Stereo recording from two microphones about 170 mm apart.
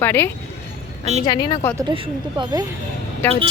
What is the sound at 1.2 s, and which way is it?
Speech, 25° left (ahead or behind).